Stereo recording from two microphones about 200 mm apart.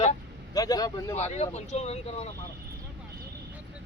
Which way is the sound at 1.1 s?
35° left (ahead or behind).